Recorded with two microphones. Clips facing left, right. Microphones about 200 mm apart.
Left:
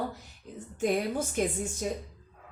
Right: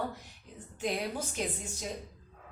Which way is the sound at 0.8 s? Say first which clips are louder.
Left 6 dB; 50° left (ahead or behind).